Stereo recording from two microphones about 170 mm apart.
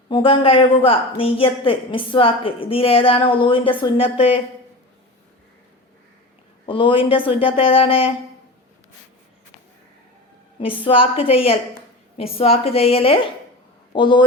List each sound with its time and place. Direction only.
0.1 s a woman's voice: 30° left (ahead or behind)
6.7 s a woman's voice: 30° left (ahead or behind)
10.8 s a woman's voice: 30° left (ahead or behind)